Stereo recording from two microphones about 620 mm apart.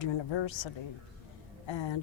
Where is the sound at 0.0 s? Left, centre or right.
Left.